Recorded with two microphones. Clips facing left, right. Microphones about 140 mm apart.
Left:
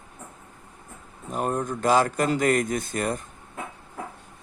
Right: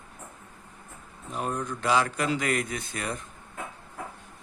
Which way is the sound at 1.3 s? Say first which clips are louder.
Left 5 dB; 45° left (ahead or behind).